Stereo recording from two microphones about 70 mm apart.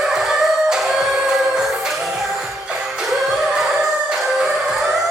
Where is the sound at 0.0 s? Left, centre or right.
Centre.